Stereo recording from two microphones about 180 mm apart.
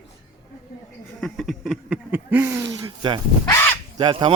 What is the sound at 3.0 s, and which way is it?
Speech, 25° right (ahead or behind).